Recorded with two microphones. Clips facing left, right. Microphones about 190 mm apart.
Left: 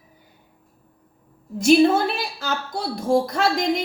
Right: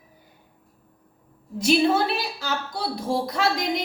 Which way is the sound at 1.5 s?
50° left (ahead or behind).